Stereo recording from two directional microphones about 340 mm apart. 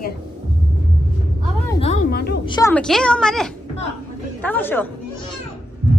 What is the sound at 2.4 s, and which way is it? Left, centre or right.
Speech, centre.